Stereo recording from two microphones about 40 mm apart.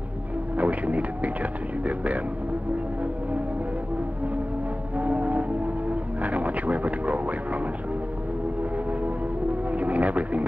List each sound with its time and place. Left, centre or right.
0.6 s speech: right
4.9 s music: right
9.7 s a sound: right